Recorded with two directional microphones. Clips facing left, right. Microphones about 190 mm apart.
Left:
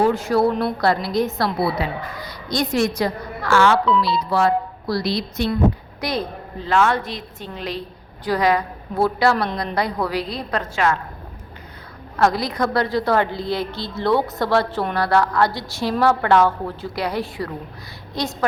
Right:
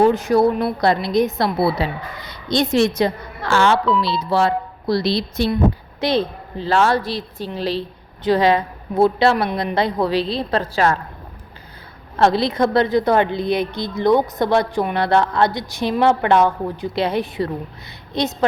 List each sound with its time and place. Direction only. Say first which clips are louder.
0.0 s a woman's voice: right 3 dB; 20° right (ahead or behind)
12.1 s a woman's voice: right 3 dB; 25° right (ahead or behind)